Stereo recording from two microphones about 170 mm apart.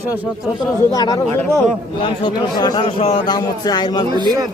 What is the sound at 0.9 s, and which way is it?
A man's voice, 20° left (ahead or behind).